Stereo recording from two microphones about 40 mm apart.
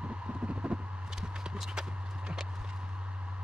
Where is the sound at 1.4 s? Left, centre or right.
Centre.